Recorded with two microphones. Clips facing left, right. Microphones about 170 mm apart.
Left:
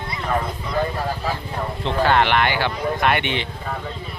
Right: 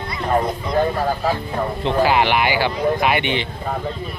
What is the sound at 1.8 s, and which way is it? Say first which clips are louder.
Speech: right 1 dB; 5° right (ahead or behind).